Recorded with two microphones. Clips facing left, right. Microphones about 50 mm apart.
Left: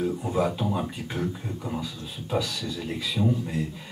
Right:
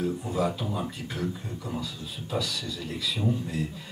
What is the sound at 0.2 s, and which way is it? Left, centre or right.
A man's voice, left.